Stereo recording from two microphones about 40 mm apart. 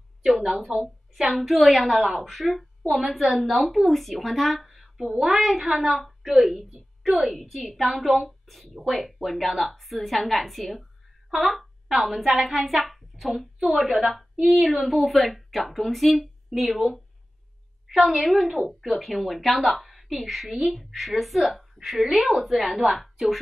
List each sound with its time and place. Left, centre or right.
0.4 s a woman's voice: centre
17.8 s a sound: centre
18.1 s a woman's voice: centre